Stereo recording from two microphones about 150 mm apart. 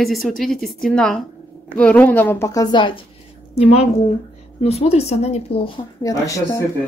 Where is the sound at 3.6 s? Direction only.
45° left (ahead or behind).